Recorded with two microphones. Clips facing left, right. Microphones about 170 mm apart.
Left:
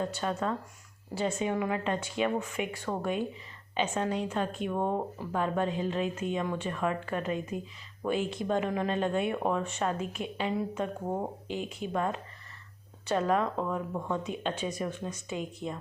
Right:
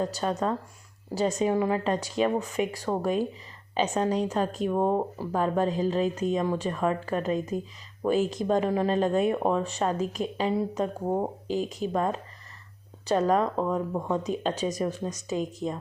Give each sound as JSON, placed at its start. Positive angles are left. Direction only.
{"t": 0.0, "sound": "speech", "side_deg": -35}